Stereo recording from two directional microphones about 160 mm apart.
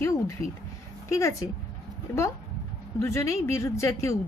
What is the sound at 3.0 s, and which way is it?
Speech, 15° left (ahead or behind).